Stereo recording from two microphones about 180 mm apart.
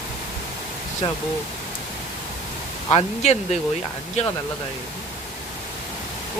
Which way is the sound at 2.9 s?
35° left (ahead or behind).